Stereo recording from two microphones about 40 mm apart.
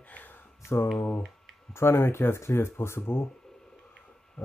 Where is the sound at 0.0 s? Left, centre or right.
Left.